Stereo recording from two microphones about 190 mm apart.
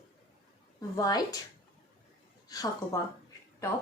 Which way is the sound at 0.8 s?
20° left (ahead or behind).